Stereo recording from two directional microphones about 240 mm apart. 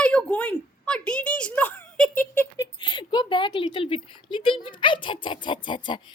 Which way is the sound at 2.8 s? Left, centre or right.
Centre.